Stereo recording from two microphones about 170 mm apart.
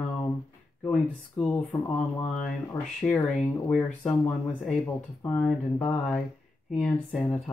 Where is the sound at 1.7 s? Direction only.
20° left (ahead or behind).